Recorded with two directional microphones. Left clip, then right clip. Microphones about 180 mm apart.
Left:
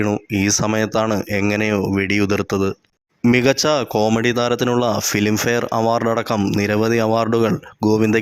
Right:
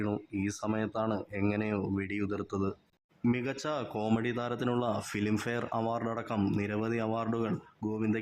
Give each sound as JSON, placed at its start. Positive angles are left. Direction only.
{"t": 0.0, "sound": "speech", "side_deg": 30}